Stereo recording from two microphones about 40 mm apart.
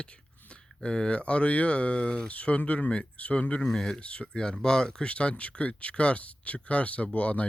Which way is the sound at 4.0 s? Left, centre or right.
Left.